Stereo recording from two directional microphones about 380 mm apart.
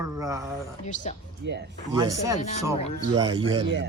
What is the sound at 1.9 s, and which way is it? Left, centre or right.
Speech, centre.